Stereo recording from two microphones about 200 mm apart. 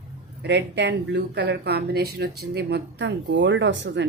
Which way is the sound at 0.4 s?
60° right (ahead or behind).